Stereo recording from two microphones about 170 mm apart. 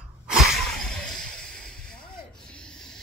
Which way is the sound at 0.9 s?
5° left (ahead or behind).